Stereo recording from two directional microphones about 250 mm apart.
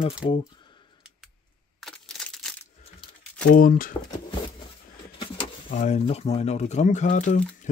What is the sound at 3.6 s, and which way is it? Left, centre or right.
Speech, left.